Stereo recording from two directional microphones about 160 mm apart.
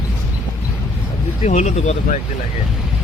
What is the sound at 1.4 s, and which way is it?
Speech, 50° left (ahead or behind).